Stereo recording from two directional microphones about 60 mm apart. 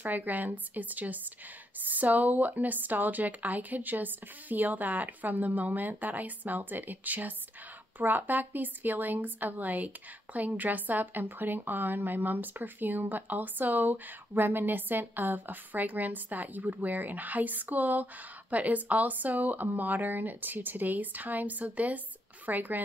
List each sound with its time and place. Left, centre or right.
0.0 s a woman's voice: right